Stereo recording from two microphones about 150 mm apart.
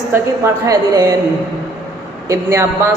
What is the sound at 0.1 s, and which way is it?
A woman's voice, 20° right (ahead or behind).